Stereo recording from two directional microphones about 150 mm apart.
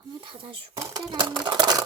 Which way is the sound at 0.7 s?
25° right (ahead or behind).